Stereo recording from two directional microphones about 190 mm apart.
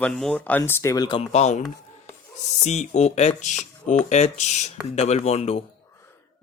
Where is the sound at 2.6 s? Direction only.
35° left (ahead or behind).